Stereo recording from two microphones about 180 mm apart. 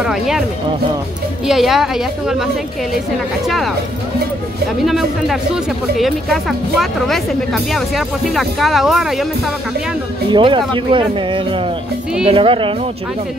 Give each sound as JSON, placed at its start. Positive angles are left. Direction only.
{"t": 0.0, "sound": "speech", "side_deg": 0}
{"t": 1.5, "sound": "speech", "side_deg": 0}
{"t": 4.8, "sound": "speech", "side_deg": 0}
{"t": 10.3, "sound": "speech", "side_deg": -25}